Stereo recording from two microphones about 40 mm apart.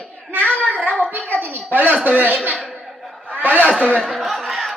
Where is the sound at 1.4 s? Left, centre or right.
Right.